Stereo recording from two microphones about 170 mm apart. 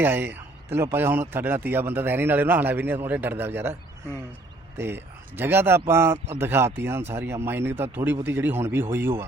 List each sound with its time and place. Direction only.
0.0 s a man's voice: 10° right (ahead or behind)